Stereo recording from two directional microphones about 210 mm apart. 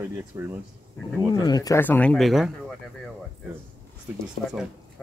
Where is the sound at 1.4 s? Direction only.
20° left (ahead or behind); by 2.8 s centre (ahead or behind).